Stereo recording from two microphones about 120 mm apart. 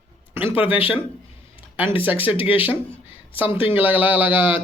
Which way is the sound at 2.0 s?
15° right (ahead or behind).